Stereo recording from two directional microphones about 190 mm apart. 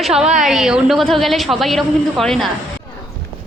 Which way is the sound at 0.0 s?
5° right (ahead or behind).